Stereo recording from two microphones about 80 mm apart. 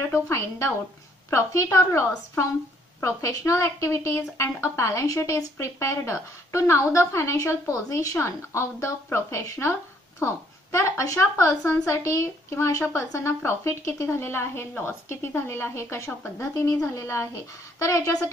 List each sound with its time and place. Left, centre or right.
0.1 s a woman's voice: left
16.1 s speech: left
16.5 s a woman's voice: left